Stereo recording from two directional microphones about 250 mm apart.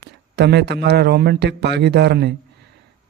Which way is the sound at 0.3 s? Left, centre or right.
Right.